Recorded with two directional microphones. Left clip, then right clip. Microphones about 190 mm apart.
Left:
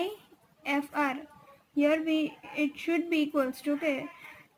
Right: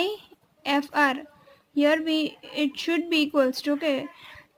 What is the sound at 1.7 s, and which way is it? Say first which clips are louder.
A woman's voice: right 4 dB; 60° right (ahead or behind).